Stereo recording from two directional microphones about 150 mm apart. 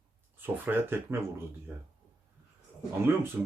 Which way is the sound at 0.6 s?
15° right (ahead or behind).